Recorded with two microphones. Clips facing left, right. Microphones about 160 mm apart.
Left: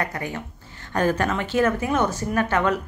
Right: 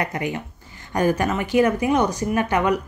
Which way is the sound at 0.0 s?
20° right (ahead or behind).